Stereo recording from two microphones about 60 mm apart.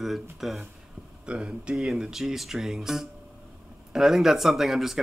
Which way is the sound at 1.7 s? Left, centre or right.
Centre.